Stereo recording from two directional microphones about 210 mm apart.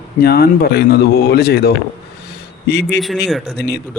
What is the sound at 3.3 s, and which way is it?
Speech, centre (ahead or behind).